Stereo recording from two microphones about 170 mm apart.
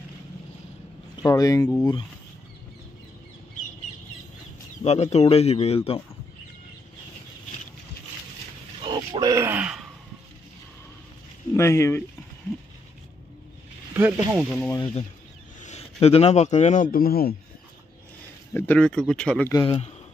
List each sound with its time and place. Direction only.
1.1 s speech: 20° left (ahead or behind)
4.8 s speech: 40° left (ahead or behind)
8.8 s speech: 25° right (ahead or behind); by 9.8 s 5° right (ahead or behind)
11.5 s speech: 15° left (ahead or behind)
13.9 s speech: 15° right (ahead or behind)
14.5 s speech: 10° left (ahead or behind)
15.6 s a man's voice: 40° left (ahead or behind); by 17.4 s 60° left (ahead or behind)
18.5 s speech: 10° left (ahead or behind)
19.5 s speech: 30° left (ahead or behind)